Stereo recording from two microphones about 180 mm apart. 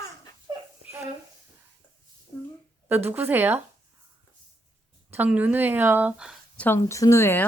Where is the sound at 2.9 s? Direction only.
10° right (ahead or behind).